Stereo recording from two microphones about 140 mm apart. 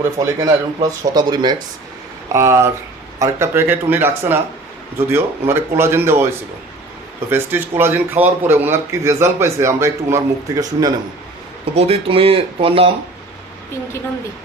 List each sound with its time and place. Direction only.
0.2 s speech: 25° right (ahead or behind)
2.3 s speech: 20° right (ahead or behind)
7.3 s speech: 15° right (ahead or behind)
11.7 s speech: 45° right (ahead or behind)